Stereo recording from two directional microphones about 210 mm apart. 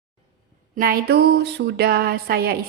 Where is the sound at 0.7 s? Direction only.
45° right (ahead or behind).